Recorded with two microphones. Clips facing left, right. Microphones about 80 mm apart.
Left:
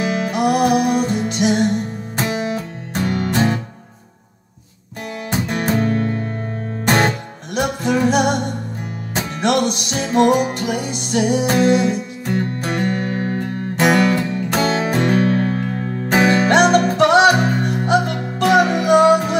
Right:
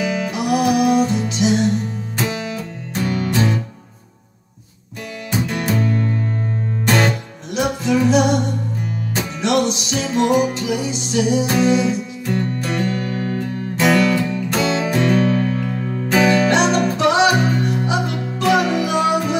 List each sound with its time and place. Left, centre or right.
0.3 s music: left
5.5 s music: left
7.5 s music: left